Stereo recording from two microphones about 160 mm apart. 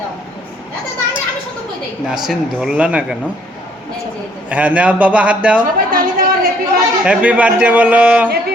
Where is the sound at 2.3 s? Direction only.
5° right (ahead or behind).